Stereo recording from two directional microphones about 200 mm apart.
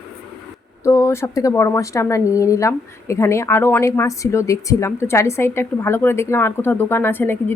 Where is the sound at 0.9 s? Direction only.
15° left (ahead or behind).